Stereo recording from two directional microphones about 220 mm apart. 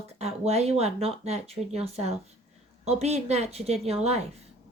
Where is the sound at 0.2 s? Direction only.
30° right (ahead or behind).